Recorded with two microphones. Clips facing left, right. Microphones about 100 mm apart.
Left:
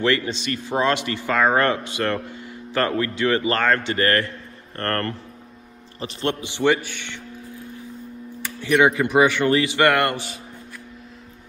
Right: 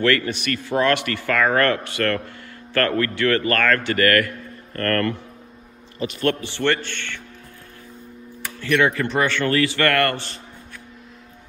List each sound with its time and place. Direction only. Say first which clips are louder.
0.0 s a man's voice: right 1 dB; 20° left (ahead or behind)
6.4 s a man's voice: left 2 dB; 15° left (ahead or behind)
8.5 s a man's voice: left 2 dB; 15° left (ahead or behind)